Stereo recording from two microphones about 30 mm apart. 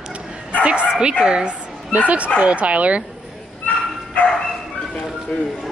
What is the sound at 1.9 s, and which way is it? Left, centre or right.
Speech, right.